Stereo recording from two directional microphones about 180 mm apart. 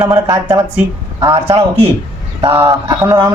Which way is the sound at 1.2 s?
30° right (ahead or behind).